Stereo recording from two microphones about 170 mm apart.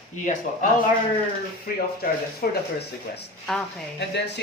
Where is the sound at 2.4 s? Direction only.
65° left (ahead or behind).